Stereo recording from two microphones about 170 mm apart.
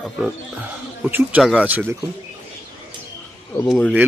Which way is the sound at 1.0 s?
10° right (ahead or behind).